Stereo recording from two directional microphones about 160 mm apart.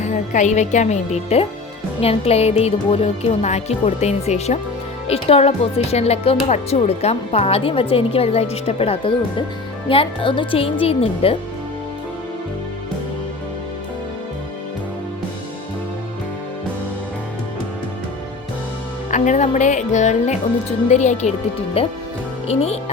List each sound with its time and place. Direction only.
0.0 s speech: 50° left (ahead or behind)
19.1 s speech: 50° left (ahead or behind)